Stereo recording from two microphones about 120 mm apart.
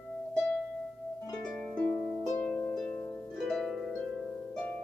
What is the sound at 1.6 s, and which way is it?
Harp, 5° left (ahead or behind).